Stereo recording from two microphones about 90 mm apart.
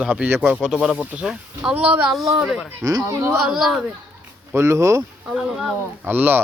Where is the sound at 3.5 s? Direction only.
5° right (ahead or behind).